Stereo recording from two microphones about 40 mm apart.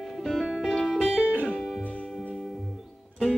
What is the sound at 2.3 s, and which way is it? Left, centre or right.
Music, centre.